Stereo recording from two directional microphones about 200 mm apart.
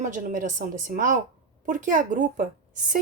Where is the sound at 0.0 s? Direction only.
40° right (ahead or behind).